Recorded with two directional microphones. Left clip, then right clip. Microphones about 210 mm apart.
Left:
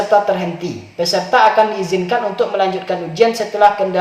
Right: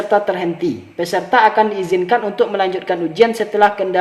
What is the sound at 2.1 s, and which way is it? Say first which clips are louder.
A man's voice: even; 45° right (ahead or behind).